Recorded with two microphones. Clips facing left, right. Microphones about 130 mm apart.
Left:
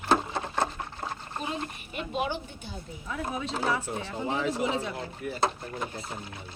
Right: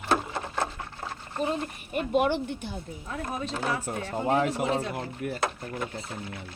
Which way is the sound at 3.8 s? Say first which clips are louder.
Right 3 dB; 50° right (ahead or behind).